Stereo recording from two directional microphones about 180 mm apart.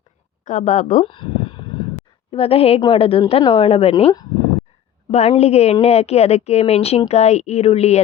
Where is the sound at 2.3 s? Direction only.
30° left (ahead or behind).